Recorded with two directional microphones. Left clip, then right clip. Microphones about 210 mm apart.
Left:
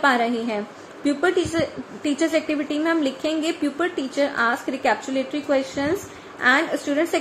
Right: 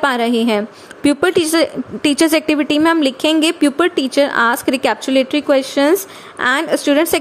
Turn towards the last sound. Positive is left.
turn(degrees=-55)  # may be behind; listen again after turning